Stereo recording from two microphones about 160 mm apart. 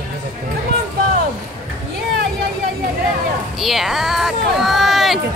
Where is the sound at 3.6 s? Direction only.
Centre (ahead or behind).